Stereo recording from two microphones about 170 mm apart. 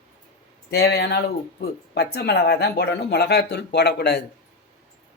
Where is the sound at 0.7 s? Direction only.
70° left (ahead or behind).